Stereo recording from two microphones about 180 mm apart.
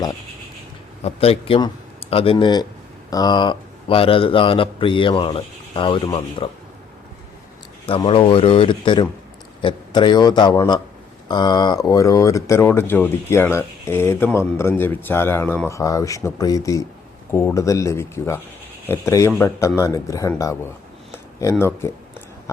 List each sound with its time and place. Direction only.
1.0 s a man's voice: 35° left (ahead or behind)
7.9 s a man's voice: 30° left (ahead or behind)
21.6 s speech: 15° left (ahead or behind)
22.5 s a sound: 15° left (ahead or behind)